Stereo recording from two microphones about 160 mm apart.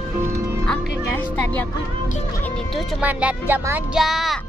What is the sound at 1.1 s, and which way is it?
Speech, 10° left (ahead or behind).